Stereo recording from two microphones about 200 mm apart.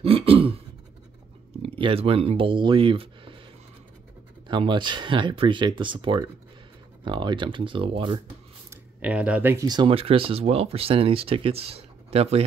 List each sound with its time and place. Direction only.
0.0 s throat clearing: 30° right (ahead or behind)
1.6 s speech: 25° right (ahead or behind)
4.5 s speech: 25° right (ahead or behind)
8.6 s speech: 5° right (ahead or behind); by 12.4 s 30° right (ahead or behind)